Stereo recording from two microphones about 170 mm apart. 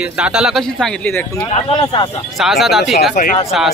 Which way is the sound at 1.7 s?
30° left (ahead or behind).